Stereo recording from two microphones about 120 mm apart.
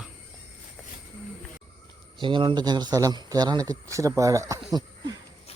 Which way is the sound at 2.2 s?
40° right (ahead or behind).